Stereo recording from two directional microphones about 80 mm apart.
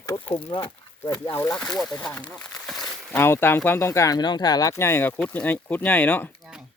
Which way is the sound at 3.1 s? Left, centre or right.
Left.